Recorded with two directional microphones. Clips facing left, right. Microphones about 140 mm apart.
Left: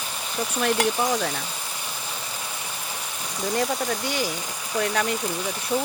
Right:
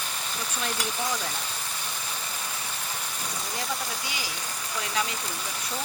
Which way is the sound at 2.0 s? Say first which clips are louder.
Left 2 dB; 5° left (ahead or behind).